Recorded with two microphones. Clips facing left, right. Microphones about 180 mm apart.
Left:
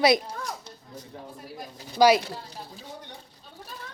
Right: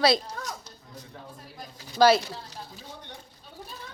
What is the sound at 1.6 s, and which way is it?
Pigeon, 10° left (ahead or behind).